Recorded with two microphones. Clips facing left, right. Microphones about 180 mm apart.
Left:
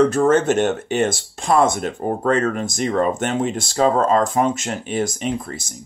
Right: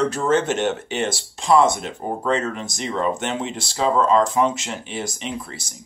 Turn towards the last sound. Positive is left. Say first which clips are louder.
# left 6 dB
turn(degrees=50)  # may be behind; listen again after turning